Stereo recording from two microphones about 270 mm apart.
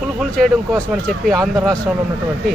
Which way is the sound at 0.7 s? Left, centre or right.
Centre.